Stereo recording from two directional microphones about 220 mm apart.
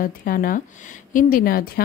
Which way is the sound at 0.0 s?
40° left (ahead or behind).